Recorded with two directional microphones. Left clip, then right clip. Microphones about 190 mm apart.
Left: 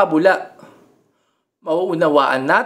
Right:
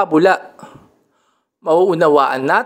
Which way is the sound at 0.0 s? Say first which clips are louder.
Right 1 dB; 35° right (ahead or behind).